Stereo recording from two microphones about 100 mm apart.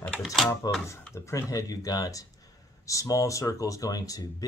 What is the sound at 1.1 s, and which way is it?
Speech, 30° left (ahead or behind).